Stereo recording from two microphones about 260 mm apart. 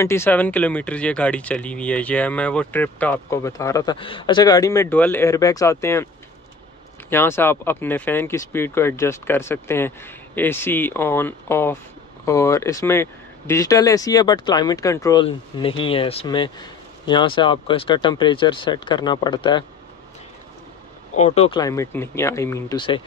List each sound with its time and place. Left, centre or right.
0.0 s speech: centre
7.1 s speech: centre
21.2 s speech: left